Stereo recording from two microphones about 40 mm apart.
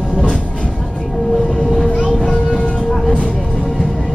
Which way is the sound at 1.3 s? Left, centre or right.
Centre.